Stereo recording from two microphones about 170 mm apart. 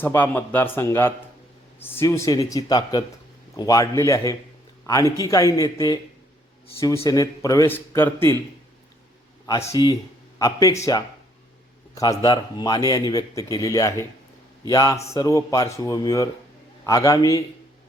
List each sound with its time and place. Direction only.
0.0 s a man's voice: 10° left (ahead or behind)
9.7 s speech: 25° left (ahead or behind)
11.9 s a man's voice: 20° left (ahead or behind)